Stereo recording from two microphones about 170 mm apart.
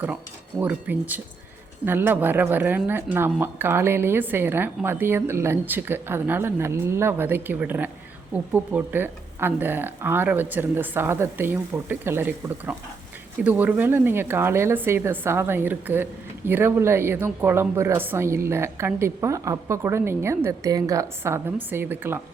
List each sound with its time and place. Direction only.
0.6 s speech: 10° right (ahead or behind)